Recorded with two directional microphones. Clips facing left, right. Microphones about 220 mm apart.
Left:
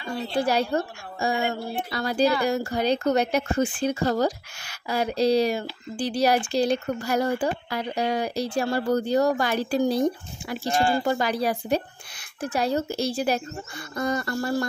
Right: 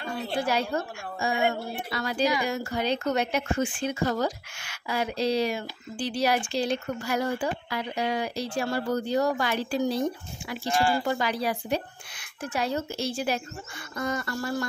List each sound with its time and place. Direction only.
0.5 s speech: 35° left (ahead or behind)